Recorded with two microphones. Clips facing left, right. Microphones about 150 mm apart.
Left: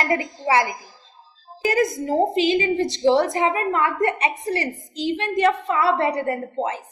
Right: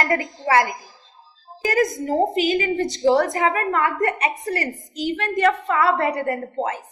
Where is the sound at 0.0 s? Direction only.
20° left (ahead or behind).